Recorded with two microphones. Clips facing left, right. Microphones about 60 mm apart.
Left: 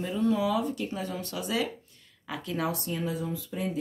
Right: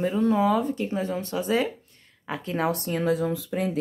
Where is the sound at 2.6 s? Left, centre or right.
Right.